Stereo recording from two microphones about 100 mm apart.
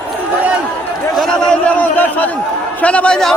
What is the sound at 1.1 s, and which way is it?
A man's voice, 5° left (ahead or behind).